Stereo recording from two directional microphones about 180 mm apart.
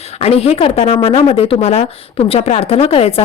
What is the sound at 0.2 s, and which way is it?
A woman's voice, 35° left (ahead or behind).